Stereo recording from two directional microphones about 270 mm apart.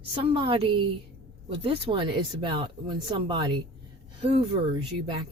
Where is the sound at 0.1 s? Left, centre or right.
Centre.